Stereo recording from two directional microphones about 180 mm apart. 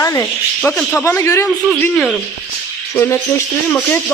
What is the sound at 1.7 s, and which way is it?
Speech, 5° left (ahead or behind).